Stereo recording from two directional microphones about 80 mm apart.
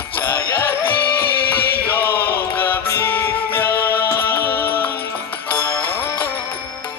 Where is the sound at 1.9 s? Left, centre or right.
Left.